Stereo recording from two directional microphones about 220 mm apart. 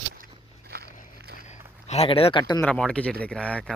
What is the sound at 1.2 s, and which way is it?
Walk, 45° right (ahead or behind).